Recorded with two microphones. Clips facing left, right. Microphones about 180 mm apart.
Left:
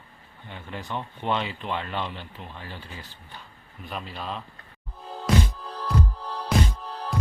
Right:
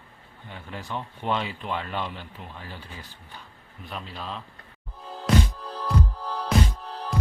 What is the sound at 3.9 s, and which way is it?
Speech, 5° left (ahead or behind).